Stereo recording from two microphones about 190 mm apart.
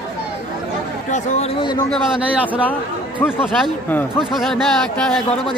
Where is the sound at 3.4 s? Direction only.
10° left (ahead or behind).